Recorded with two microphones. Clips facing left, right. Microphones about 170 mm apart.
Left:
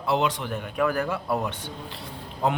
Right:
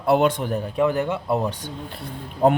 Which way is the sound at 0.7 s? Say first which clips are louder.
Right 3 dB; 25° right (ahead or behind).